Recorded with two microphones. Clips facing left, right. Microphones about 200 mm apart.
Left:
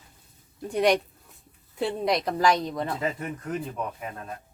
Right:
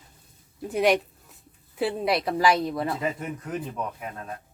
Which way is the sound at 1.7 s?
5° right (ahead or behind).